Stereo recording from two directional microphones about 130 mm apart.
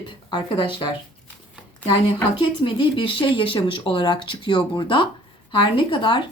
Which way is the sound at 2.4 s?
40° left (ahead or behind).